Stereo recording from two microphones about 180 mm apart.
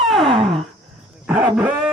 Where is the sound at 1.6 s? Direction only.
5° right (ahead or behind).